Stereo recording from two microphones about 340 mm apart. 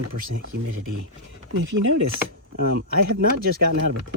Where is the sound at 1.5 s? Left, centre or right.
Right.